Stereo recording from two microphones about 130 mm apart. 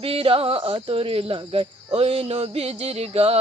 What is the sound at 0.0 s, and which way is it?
Speech, 45° right (ahead or behind).